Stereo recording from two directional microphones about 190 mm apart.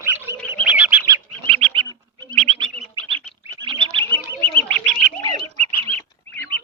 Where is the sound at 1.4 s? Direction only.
30° right (ahead or behind).